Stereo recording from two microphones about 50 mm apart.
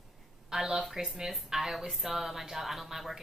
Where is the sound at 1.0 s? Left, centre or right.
Centre.